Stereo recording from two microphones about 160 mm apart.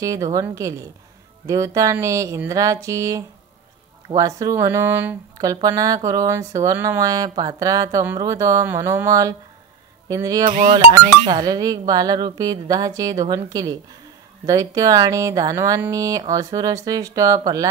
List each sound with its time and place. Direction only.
0.0 s speech: 20° right (ahead or behind)